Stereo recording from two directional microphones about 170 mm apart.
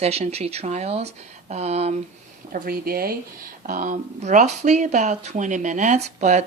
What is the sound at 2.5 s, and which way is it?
Speech, 55° right (ahead or behind).